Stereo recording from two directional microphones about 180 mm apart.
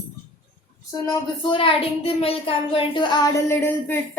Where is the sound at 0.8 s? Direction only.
20° left (ahead or behind).